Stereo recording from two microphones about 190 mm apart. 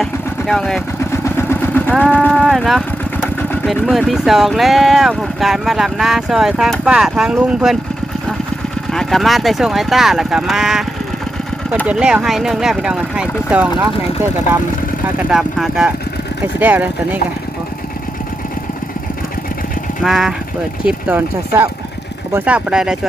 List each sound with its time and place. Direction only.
0.0 s vehicle: centre (ahead or behind)
1.1 s vehicle: 15° left (ahead or behind)
1.9 s speech: 5° right (ahead or behind)
3.8 s speech: centre (ahead or behind)
8.9 s speech: centre (ahead or behind)
11.9 s speech: 5° right (ahead or behind)
13.7 s speech: 20° right (ahead or behind)
15.3 s speech: centre (ahead or behind)
20.0 s speech: centre (ahead or behind)